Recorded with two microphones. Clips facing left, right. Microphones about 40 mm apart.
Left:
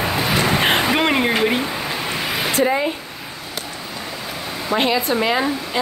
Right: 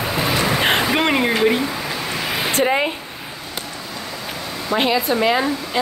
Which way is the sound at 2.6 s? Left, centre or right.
Right.